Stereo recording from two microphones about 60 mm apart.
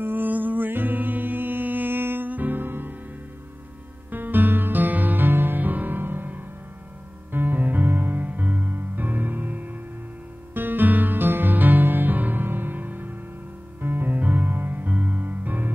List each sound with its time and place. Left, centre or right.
0.0 s music: right
4.1 s music: right